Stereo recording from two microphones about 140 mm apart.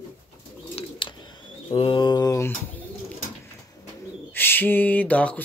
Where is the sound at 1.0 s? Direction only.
35° left (ahead or behind).